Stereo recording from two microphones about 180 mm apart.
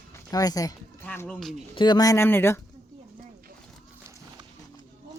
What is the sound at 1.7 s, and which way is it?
Speech, 25° left (ahead or behind).